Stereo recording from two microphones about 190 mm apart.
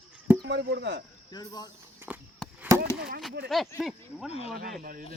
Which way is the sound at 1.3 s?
20° left (ahead or behind).